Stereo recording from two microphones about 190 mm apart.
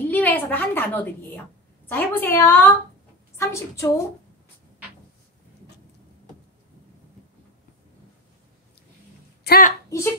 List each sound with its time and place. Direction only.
0.0 s a woman's voice: 10° left (ahead or behind)
9.4 s a woman's voice: 50° left (ahead or behind)